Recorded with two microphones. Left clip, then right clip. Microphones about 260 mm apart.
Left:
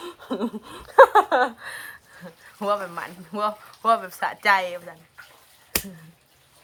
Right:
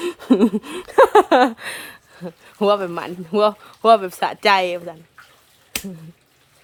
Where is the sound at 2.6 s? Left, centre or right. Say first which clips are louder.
Right 7 dB; right.